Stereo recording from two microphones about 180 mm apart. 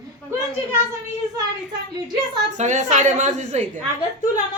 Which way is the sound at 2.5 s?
40° right (ahead or behind).